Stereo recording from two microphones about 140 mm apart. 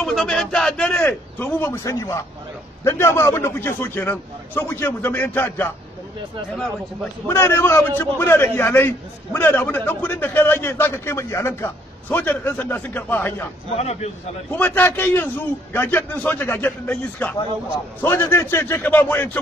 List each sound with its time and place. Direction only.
0.0 s a man's voice: 5° left (ahead or behind)
7.2 s a man's voice: 20° left (ahead or behind)
13.7 s speech: 50° left (ahead or behind)
14.5 s a man's voice: 15° left (ahead or behind)